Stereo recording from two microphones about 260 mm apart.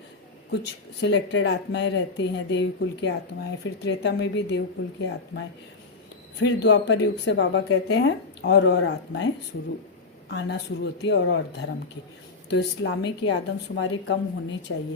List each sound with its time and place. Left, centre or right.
0.5 s speech: left